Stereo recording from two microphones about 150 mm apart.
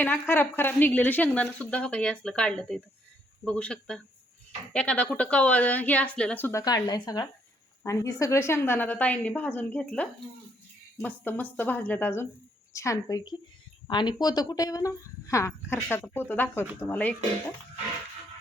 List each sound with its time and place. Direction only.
0.0 s a woman's voice: 15° left (ahead or behind)